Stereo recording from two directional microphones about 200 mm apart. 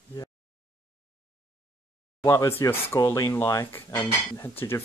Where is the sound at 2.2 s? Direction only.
10° left (ahead or behind).